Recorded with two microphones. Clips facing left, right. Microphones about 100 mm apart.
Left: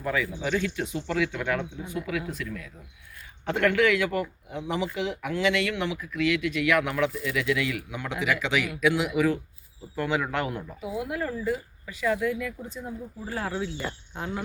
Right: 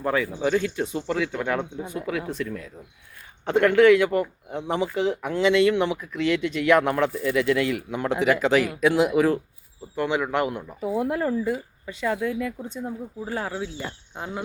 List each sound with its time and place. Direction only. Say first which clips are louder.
0.0 s speech: right 5 dB; 35° right (ahead or behind)
9.9 s speech: right 3 dB; 20° right (ahead or behind)
10.8 s speech: right 7 dB; 40° right (ahead or behind)